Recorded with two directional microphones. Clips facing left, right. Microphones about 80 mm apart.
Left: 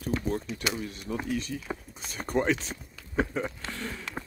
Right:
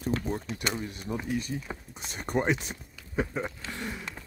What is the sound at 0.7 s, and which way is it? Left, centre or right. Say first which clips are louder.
Speech: even; right.